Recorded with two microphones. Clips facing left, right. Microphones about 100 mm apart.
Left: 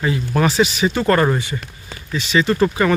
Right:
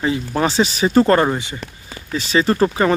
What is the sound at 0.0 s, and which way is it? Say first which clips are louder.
Speech: even; 25° right (ahead or behind).